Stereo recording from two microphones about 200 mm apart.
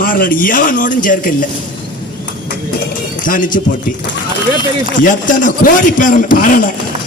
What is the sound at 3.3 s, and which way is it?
Speech, 40° left (ahead or behind).